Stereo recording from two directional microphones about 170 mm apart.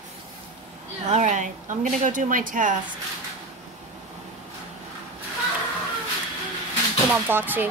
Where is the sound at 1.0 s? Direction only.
45° right (ahead or behind).